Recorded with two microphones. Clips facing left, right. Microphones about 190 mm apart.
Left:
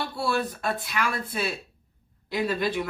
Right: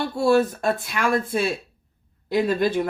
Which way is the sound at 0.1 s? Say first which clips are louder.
Right 9 dB; 45° right (ahead or behind).